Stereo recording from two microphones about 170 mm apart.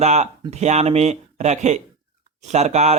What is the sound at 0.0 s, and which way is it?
Speech, 40° right (ahead or behind).